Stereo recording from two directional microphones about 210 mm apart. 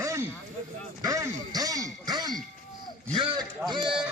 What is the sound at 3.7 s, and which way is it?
Sheep, 25° right (ahead or behind).